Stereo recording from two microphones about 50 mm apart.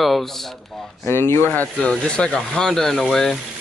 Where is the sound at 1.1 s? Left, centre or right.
Left.